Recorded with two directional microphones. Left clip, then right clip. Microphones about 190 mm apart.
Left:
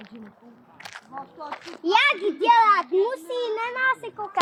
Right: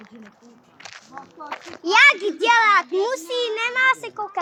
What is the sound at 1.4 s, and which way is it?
Speech, 45° right (ahead or behind).